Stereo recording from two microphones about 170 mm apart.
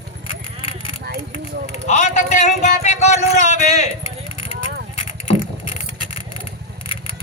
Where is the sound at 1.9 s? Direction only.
45° left (ahead or behind).